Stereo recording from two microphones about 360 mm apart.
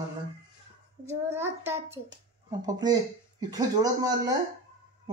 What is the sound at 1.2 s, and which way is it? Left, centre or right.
Speech, centre.